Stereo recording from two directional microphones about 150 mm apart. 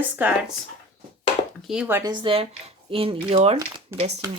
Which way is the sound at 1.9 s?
25° right (ahead or behind).